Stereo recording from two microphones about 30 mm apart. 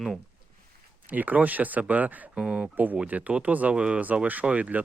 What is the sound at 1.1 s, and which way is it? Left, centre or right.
Speech, right.